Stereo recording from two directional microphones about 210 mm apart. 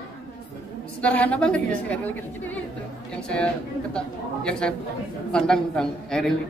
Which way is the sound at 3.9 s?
5° left (ahead or behind).